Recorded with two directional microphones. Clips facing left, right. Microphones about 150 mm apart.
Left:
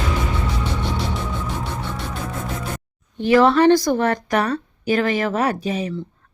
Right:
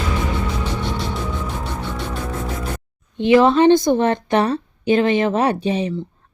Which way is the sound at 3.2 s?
20° right (ahead or behind).